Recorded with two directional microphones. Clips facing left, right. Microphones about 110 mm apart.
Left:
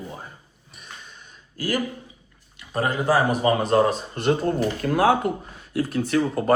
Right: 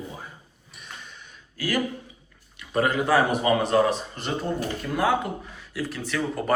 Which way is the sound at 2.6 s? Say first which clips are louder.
Right 1 dB; 30° left (ahead or behind).